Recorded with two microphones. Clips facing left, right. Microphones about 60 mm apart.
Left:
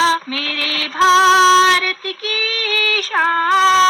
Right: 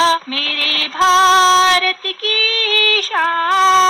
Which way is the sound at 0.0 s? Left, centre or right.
Left.